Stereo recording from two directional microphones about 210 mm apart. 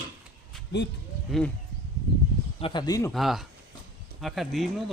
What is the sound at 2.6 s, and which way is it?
Speech, 25° left (ahead or behind).